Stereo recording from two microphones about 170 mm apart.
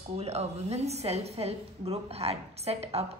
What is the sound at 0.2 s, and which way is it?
A woman's voice, 40° right (ahead or behind).